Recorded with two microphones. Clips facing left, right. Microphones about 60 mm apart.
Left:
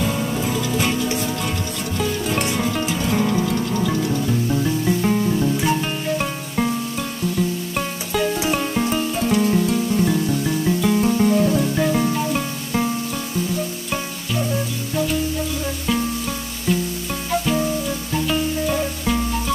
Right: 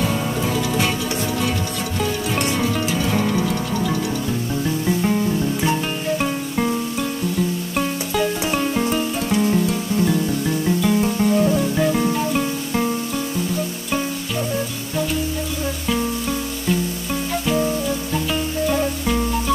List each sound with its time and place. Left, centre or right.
0.5 s music: right
2.0 s music: centre
3.2 s music: centre
4.5 s music: centre
7.7 s music: centre
18.3 s music: centre